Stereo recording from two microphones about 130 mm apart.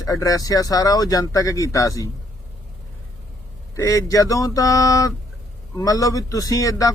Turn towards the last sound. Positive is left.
turn(degrees=25)  # may be behind; listen again after turning